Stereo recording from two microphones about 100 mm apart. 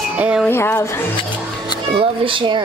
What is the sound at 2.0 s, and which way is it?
Speech, 60° right (ahead or behind).